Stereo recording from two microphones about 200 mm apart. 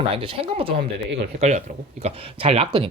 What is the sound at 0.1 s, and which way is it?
Speech, 25° right (ahead or behind).